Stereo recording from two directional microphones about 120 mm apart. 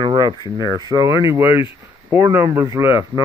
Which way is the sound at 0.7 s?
30° right (ahead or behind).